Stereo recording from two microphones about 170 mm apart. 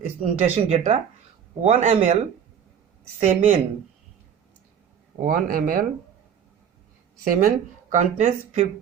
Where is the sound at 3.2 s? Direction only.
50° right (ahead or behind).